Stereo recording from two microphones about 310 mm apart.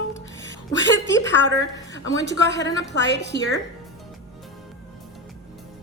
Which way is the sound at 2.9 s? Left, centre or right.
Left.